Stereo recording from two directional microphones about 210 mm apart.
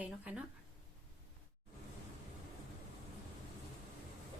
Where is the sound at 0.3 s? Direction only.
5° right (ahead or behind).